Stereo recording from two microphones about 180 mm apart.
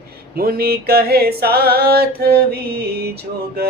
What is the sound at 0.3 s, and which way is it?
Music, 55° right (ahead or behind).